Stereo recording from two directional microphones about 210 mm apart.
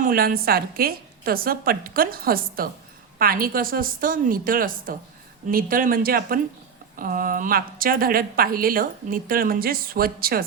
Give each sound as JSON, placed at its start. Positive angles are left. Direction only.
{"t": 0.0, "sound": "a woman's voice", "side_deg": -45}